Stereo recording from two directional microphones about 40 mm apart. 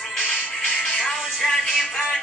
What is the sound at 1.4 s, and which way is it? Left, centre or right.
Music, centre.